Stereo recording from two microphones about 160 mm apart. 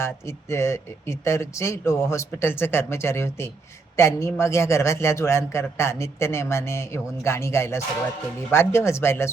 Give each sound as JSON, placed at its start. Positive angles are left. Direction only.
{"t": 0.0, "sound": "a man's voice", "side_deg": 15}